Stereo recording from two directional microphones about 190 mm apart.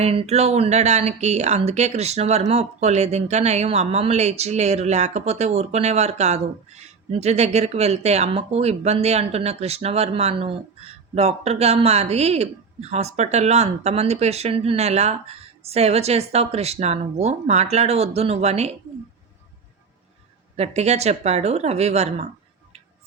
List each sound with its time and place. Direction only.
0.0 s speech: 30° right (ahead or behind)
20.6 s speech: 35° right (ahead or behind)